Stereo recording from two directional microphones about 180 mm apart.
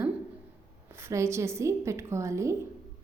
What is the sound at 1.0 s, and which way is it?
A woman's voice, 15° right (ahead or behind).